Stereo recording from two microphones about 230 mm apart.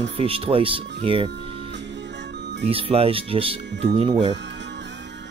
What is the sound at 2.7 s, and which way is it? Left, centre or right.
Speech, right.